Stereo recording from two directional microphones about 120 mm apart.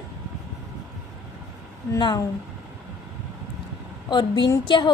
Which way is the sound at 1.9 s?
40° left (ahead or behind).